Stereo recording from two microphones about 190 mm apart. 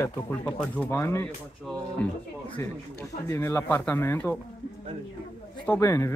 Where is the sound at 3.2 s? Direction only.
15° left (ahead or behind).